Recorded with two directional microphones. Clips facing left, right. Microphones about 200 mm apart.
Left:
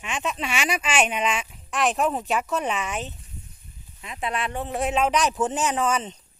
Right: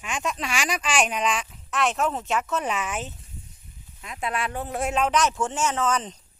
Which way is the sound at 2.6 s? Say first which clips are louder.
Left 1 dB; 5° right (ahead or behind).